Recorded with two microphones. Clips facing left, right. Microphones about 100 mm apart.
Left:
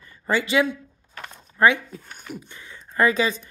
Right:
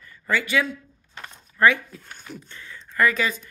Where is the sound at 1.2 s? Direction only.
20° left (ahead or behind).